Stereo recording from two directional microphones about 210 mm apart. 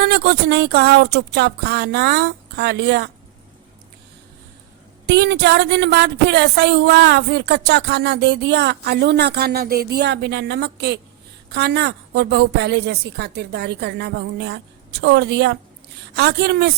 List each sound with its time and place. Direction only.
0.0 s a woman's voice: 50° right (ahead or behind)
5.0 s a woman's voice: 55° right (ahead or behind)